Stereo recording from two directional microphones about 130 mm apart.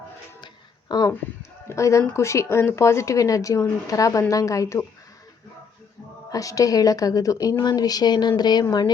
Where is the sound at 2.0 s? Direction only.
20° left (ahead or behind).